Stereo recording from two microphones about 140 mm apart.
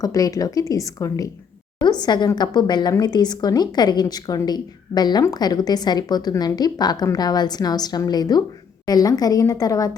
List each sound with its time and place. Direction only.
0.0 s a woman's voice: 25° left (ahead or behind)